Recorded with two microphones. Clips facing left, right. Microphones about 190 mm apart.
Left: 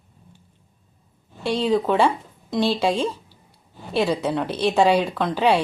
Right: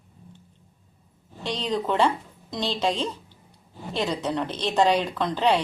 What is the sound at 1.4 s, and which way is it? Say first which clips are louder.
Speech: left 6 dB; 10° left (ahead or behind).